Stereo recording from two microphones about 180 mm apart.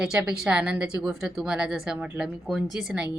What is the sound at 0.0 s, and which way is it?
A woman's voice, 5° right (ahead or behind).